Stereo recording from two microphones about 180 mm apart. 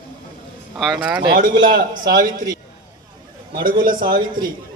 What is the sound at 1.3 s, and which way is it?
A man's voice, 55° right (ahead or behind).